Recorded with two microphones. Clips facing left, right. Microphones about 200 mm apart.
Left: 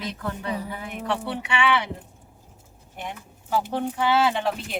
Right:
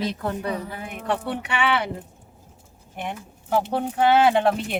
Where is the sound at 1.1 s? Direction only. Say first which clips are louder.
Right 2 dB; 45° right (ahead or behind).